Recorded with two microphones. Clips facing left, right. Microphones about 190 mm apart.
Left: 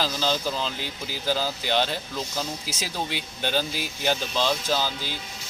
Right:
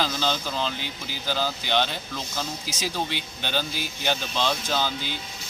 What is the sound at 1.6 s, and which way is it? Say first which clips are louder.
Speech: even; 5° left (ahead or behind).